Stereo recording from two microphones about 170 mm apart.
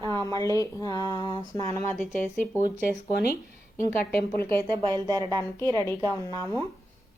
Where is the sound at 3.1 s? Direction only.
70° left (ahead or behind).